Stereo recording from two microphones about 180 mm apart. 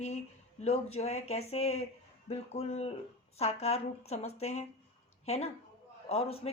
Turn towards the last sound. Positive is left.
turn(degrees=35)  # may be behind; listen again after turning